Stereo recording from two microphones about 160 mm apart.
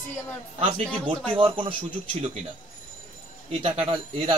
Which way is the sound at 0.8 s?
5° left (ahead or behind).